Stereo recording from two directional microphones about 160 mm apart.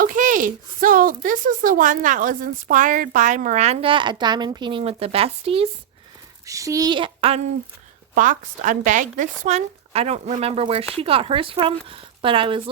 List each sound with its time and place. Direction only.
0.0 s speech: 55° right (ahead or behind); by 5.6 s 35° right (ahead or behind)
6.4 s speech: 20° right (ahead or behind); by 7.5 s 40° right (ahead or behind)
8.1 s a woman's voice: 55° right (ahead or behind); by 12.7 s 35° right (ahead or behind)